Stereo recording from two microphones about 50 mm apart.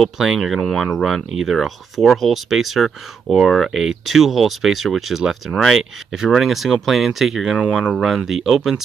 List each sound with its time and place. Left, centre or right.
0.0 s speech: centre
7.8 s speech: right
8.3 s speech: centre